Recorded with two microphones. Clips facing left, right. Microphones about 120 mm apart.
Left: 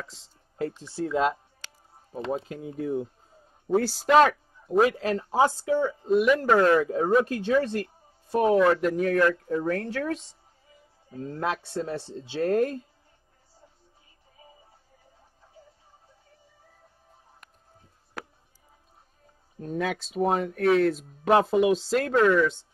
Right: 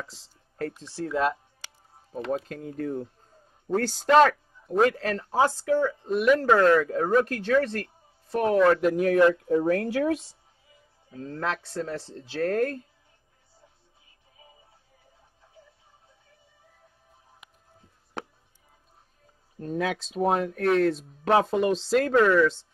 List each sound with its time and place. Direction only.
0.0 s speech: centre (ahead or behind)
1.1 s speech: 20° left (ahead or behind)
2.3 s speech: 5° left (ahead or behind)
8.5 s speech: centre (ahead or behind)
9.1 s speech: 20° right (ahead or behind)
11.1 s speech: 15° left (ahead or behind)
18.2 s a sound: 25° right (ahead or behind)
19.6 s speech: centre (ahead or behind)